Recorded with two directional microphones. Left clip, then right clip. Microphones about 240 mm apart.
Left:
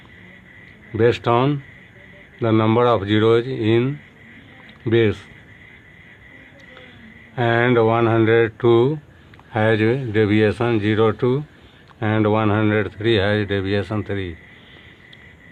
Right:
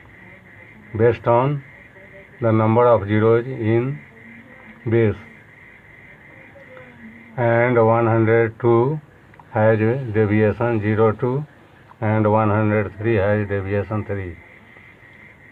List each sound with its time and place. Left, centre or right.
0.9 s speech: left
7.3 s speech: left